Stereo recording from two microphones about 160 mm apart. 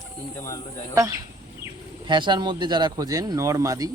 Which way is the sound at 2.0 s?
30° right (ahead or behind).